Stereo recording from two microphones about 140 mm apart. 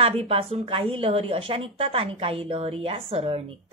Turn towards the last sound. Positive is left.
turn(degrees=-45)  # may be behind; listen again after turning